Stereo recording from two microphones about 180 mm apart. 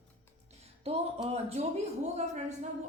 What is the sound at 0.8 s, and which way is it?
Speech, 35° right (ahead or behind).